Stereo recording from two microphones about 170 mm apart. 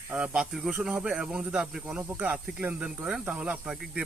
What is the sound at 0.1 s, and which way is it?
Speech, 5° right (ahead or behind).